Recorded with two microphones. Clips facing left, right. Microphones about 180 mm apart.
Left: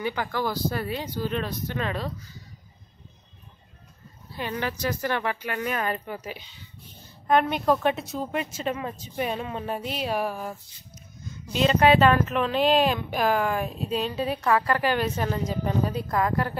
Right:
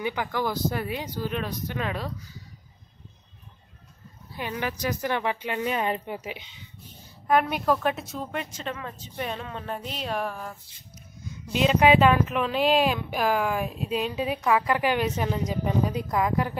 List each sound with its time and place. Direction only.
0.0 s a woman's voice: 15° right (ahead or behind)
4.3 s speech: 10° right (ahead or behind)
7.2 s a woman's voice: 5° right (ahead or behind)
11.4 s a woman's voice: 10° right (ahead or behind)